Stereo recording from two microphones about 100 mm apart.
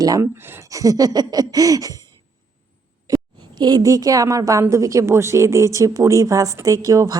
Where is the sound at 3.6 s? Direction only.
40° right (ahead or behind).